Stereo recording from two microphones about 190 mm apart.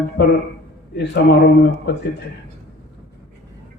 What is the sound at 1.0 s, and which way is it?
A man's voice, 60° left (ahead or behind).